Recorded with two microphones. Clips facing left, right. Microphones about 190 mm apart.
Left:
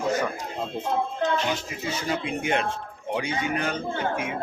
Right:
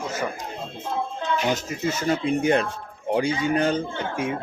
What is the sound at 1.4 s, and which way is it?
A man's voice, 45° right (ahead or behind).